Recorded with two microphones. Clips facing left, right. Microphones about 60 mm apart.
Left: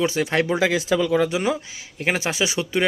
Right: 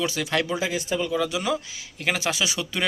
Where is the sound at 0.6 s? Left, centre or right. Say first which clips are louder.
Left 6 dB; left.